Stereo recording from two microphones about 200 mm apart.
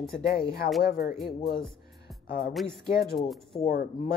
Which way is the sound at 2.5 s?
Centre (ahead or behind).